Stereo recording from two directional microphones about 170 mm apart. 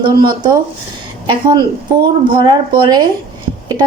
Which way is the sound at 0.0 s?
25° right (ahead or behind).